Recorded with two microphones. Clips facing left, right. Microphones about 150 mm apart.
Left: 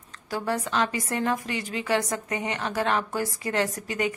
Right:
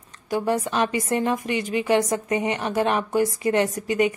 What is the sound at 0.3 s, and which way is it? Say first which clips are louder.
A woman's voice: right 5 dB; 20° right (ahead or behind).